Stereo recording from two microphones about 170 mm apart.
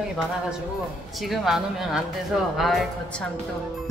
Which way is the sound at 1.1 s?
Centre (ahead or behind).